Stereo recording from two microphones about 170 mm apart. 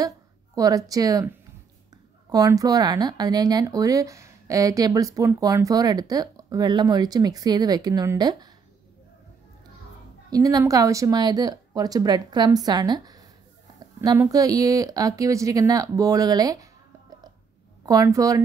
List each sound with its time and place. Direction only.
0.6 s speech: 20° right (ahead or behind)
10.3 s speech: 20° right (ahead or behind)
14.3 s speech: 20° right (ahead or behind)
17.8 s speech: 20° right (ahead or behind)